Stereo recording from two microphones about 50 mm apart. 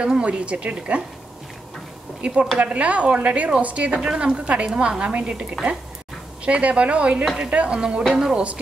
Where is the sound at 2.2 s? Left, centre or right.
Right.